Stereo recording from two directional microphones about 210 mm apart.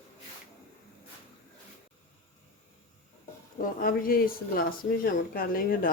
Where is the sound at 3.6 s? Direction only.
45° left (ahead or behind).